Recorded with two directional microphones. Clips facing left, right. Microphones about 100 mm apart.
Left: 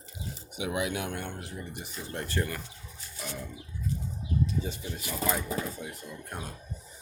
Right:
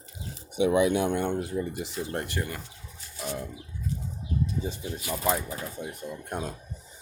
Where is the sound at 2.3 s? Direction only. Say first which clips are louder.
Left 1 dB; 20° right (ahead or behind).